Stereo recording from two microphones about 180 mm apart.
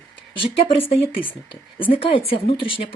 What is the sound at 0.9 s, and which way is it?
A woman's voice, 30° left (ahead or behind).